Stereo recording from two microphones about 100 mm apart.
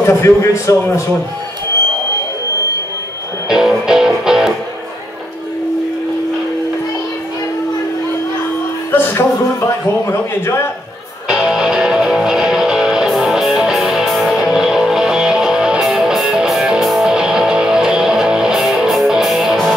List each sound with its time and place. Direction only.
0.0 s a man's voice: 30° left (ahead or behind)
3.4 s music: 5° right (ahead or behind)
8.9 s a sound: 25° left (ahead or behind)
11.2 s music: 10° right (ahead or behind)